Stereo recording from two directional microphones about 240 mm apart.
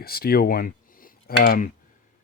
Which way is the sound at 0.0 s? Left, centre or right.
Left.